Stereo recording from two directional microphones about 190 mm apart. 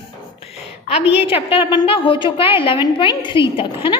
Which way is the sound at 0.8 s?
30° left (ahead or behind).